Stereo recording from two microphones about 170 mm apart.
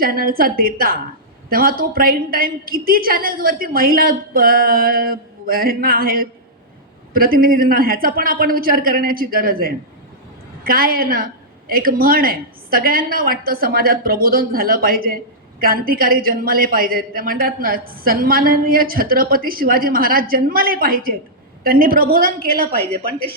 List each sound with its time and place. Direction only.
0.0 s a woman's voice: 60° right (ahead or behind)